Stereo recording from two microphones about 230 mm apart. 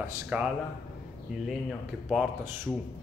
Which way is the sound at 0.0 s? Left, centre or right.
Centre.